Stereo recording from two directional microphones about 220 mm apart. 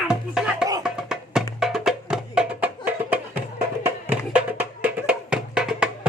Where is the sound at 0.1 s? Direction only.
5° right (ahead or behind).